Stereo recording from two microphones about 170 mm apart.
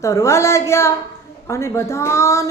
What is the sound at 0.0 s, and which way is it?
Speech, 15° left (ahead or behind).